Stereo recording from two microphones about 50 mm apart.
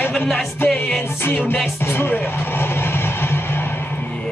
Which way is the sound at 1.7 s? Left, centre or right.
Left.